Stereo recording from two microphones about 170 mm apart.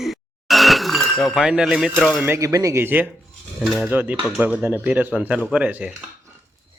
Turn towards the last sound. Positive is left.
turn(degrees=-10)  # may be behind; listen again after turning